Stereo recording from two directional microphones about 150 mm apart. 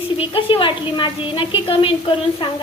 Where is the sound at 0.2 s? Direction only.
35° left (ahead or behind).